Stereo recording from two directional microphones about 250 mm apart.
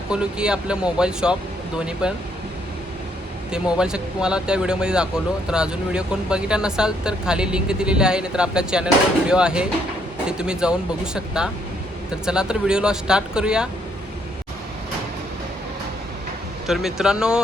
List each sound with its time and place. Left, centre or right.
0.1 s speech: centre
3.5 s speech: centre
16.6 s speech: centre